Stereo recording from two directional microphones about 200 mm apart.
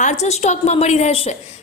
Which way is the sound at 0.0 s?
35° left (ahead or behind).